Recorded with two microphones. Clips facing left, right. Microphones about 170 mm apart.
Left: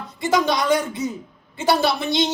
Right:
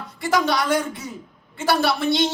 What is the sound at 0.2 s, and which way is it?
Speech, 20° left (ahead or behind).